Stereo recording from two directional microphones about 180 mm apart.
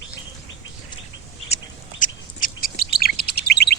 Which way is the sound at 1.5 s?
45° left (ahead or behind).